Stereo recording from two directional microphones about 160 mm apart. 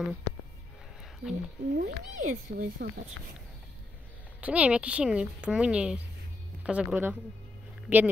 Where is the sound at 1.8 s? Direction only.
55° right (ahead or behind).